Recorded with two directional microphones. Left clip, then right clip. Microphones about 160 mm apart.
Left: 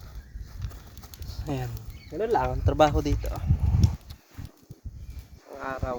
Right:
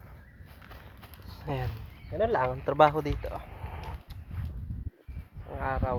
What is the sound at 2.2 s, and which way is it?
Speech, 15° left (ahead or behind).